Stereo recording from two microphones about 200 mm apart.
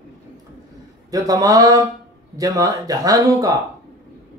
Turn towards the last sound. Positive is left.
turn(degrees=-15)  # may be behind; listen again after turning